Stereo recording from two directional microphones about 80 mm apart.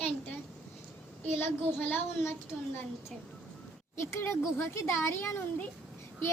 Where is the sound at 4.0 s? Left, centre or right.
Left.